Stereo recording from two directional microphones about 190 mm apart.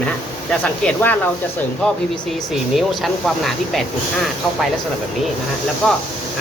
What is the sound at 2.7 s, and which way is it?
Speech, centre (ahead or behind).